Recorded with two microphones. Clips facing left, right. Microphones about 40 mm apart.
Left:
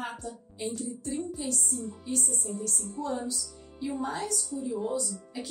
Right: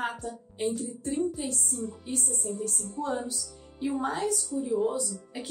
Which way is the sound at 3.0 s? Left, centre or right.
Right.